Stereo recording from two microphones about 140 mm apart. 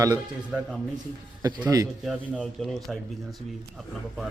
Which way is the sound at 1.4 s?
25° right (ahead or behind).